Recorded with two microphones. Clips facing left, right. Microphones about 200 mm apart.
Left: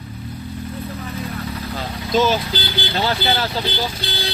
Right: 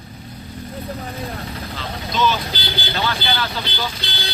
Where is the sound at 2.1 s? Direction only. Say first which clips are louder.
Left 4 dB; 45° left (ahead or behind).